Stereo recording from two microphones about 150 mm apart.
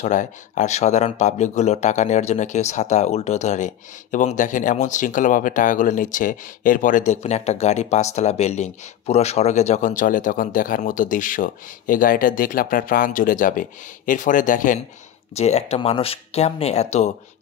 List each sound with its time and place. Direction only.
0.0 s speech: 55° left (ahead or behind)
15.3 s speech: 45° left (ahead or behind)